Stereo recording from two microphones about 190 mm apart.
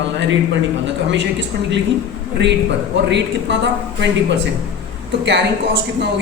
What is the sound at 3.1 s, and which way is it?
A woman's voice, 65° right (ahead or behind).